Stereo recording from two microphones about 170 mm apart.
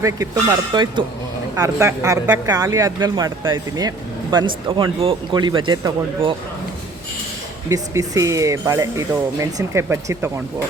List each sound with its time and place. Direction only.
0.7 s speech: 25° right (ahead or behind)
7.7 s speech: 20° right (ahead or behind)